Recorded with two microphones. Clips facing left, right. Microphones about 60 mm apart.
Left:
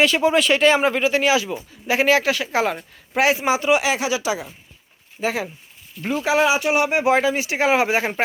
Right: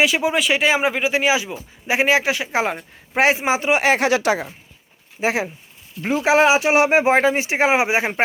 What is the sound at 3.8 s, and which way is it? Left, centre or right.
Speech, right.